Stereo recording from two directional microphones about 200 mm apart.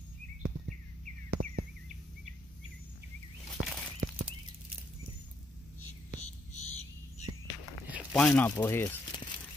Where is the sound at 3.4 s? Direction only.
5° left (ahead or behind).